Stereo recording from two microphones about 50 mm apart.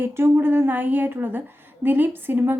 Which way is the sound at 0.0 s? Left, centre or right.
Right.